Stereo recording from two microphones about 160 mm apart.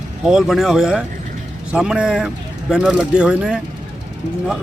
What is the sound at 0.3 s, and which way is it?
Speech, 5° right (ahead or behind).